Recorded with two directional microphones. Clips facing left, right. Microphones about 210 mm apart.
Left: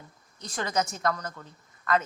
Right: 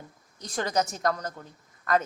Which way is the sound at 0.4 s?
35° right (ahead or behind).